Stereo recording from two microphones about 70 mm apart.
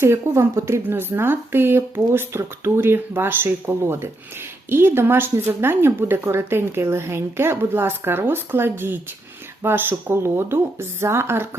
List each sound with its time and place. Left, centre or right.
0.0 s speech: right